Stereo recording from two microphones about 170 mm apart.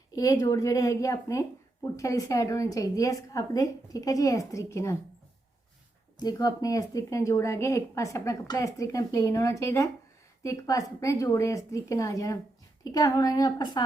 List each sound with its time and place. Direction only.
0.2 s speech: 20° left (ahead or behind)
6.1 s speech: 20° left (ahead or behind)